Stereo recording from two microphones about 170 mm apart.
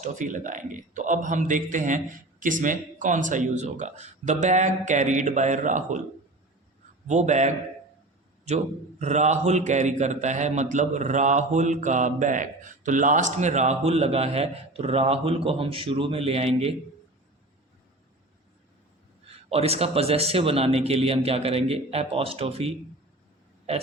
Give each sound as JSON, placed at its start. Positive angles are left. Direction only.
{"t": 0.0, "sound": "a man's voice", "side_deg": -45}
{"t": 7.1, "sound": "a man's voice", "side_deg": -45}
{"t": 19.5, "sound": "a man's voice", "side_deg": -35}